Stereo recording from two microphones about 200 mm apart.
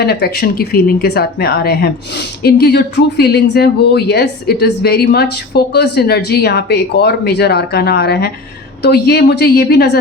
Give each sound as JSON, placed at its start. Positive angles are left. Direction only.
{"t": 0.0, "sound": "a woman's voice", "side_deg": 55}